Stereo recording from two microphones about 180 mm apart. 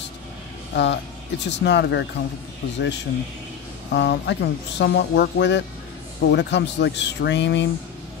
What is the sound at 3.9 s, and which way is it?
Speech, 70° left (ahead or behind).